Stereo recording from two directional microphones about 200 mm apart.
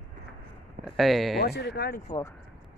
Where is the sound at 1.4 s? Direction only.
55° left (ahead or behind).